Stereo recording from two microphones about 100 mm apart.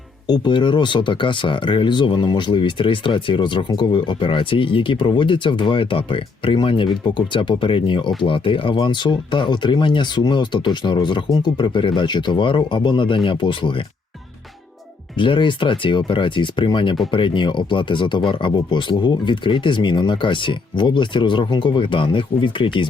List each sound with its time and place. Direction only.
0.3 s speech: 50° left (ahead or behind)
15.2 s speech: 55° left (ahead or behind)